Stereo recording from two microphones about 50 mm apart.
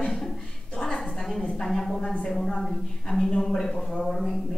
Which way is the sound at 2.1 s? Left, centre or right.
Centre.